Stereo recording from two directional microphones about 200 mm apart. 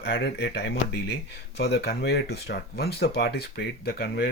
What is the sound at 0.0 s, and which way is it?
Speech, 55° left (ahead or behind).